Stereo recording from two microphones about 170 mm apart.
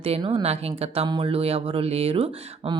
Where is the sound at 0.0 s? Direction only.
35° right (ahead or behind).